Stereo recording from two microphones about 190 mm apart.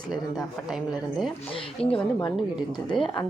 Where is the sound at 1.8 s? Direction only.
30° left (ahead or behind).